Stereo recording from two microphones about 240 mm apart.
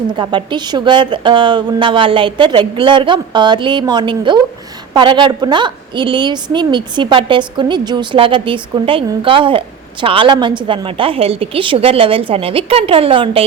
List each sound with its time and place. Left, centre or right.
0.2 s a woman's voice: centre